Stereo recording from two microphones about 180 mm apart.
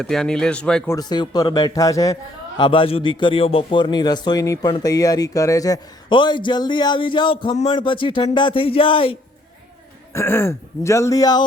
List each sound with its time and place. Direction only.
0.0 s speech: 5° left (ahead or behind)
0.9 s a man's voice: 20° left (ahead or behind)
10.1 s speech: 15° left (ahead or behind)